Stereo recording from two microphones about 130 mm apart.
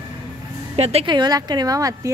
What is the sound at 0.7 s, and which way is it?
Speech, 50° right (ahead or behind).